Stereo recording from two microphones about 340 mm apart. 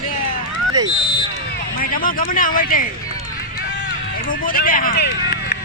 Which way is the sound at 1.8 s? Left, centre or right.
Left.